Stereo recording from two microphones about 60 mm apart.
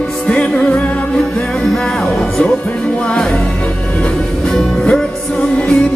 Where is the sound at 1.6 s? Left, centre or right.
Centre.